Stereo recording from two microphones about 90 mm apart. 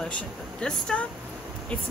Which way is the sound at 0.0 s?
10° left (ahead or behind).